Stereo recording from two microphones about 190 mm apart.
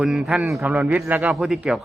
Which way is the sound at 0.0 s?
5° right (ahead or behind).